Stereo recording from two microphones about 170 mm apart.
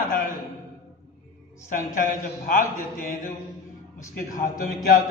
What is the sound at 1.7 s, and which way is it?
A man's voice, 55° left (ahead or behind).